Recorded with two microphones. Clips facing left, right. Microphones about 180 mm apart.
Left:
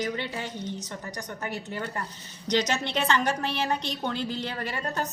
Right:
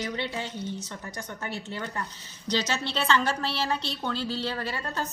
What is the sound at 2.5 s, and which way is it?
A woman's voice, 15° left (ahead or behind).